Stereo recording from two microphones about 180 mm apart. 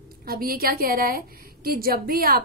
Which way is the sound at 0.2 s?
55° right (ahead or behind).